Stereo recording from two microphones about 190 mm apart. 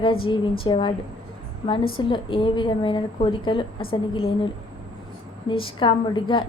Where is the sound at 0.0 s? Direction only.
25° left (ahead or behind).